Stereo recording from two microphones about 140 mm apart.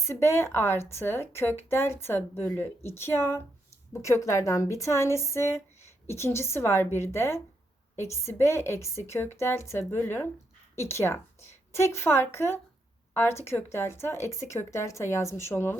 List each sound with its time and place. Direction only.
0.0 s a woman's voice: 20° left (ahead or behind)